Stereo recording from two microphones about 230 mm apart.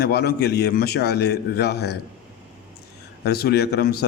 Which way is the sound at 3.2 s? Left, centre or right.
Left.